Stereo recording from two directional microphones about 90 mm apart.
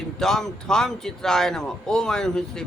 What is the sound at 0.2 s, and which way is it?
A man's voice, 5° left (ahead or behind).